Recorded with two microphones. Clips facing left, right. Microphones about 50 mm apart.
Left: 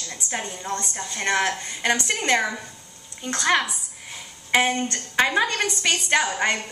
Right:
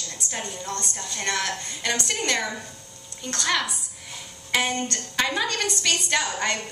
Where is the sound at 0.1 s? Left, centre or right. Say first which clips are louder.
Left 4 dB; left.